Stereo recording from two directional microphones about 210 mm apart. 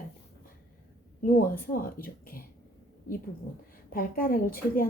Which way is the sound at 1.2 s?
40° left (ahead or behind).